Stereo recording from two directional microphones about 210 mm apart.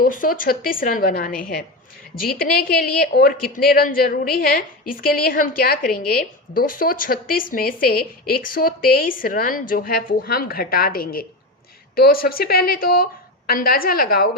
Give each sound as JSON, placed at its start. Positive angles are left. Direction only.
{"t": 0.0, "sound": "a woman's voice", "side_deg": 40}